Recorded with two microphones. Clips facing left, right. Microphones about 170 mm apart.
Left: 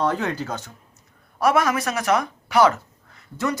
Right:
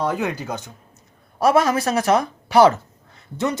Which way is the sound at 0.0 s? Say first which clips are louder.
Even; 10° right (ahead or behind).